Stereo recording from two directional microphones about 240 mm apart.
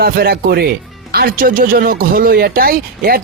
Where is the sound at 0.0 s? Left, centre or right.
Right.